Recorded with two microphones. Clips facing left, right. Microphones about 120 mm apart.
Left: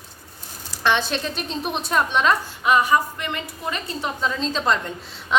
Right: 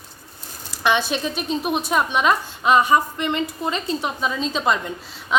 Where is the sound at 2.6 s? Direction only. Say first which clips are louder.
Right 3 dB; 25° right (ahead or behind).